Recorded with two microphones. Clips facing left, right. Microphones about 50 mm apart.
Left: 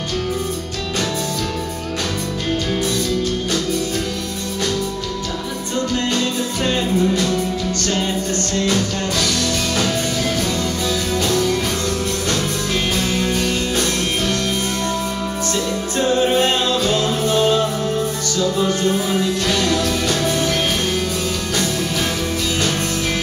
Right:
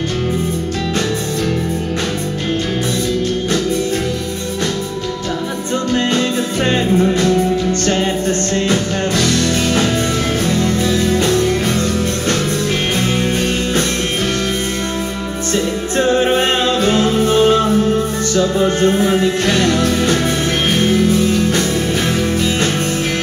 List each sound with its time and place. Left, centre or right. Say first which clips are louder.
6.1 s music: right 4 dB; right
8.6 s music: right 3 dB; right
10.5 s music: right 5 dB; right
13.2 s music: right 3 dB; right
16.0 s music: right 2 dB; right